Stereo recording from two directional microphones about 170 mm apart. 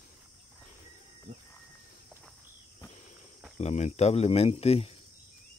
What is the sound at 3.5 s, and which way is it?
Speech, 40° left (ahead or behind).